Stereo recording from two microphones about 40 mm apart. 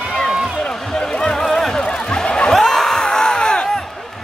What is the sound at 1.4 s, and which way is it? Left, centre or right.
Music, centre.